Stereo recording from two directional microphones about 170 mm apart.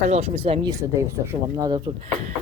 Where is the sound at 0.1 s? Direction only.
40° right (ahead or behind).